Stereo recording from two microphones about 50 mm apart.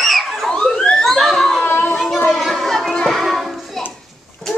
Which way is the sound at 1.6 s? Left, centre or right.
Left.